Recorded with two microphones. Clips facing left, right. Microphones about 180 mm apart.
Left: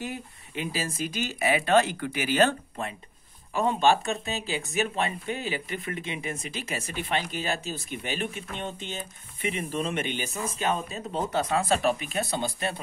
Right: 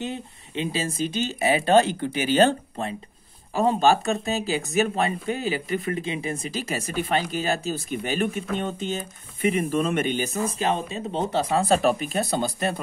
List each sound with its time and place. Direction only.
0.0 s speech: 25° right (ahead or behind); by 12.8 s 45° right (ahead or behind)